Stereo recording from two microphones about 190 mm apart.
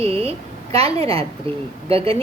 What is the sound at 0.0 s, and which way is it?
Speech, 30° right (ahead or behind).